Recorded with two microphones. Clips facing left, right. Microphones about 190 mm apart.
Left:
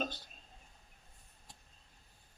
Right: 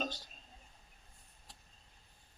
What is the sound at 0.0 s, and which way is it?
Speech, 55° left (ahead or behind).